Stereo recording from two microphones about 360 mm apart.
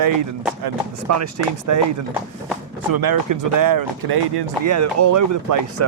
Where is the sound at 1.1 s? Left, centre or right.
Right.